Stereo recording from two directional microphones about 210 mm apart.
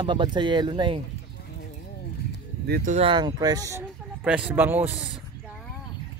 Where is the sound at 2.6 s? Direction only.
45° right (ahead or behind).